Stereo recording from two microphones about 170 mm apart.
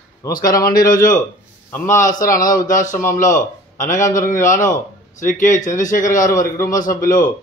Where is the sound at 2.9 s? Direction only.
15° left (ahead or behind).